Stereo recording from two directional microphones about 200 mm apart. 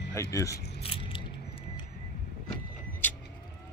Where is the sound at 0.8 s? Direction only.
25° left (ahead or behind).